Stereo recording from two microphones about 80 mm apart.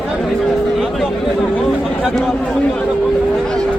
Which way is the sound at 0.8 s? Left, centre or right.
Centre.